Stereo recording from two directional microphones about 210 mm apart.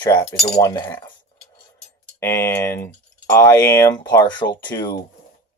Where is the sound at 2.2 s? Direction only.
10° left (ahead or behind).